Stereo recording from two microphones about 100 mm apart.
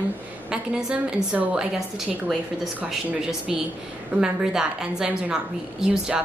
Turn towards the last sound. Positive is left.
turn(degrees=-5)  # may be behind; listen again after turning